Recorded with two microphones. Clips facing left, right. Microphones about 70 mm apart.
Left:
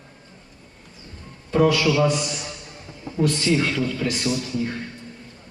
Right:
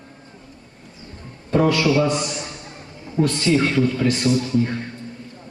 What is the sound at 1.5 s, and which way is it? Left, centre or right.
A man's voice, right.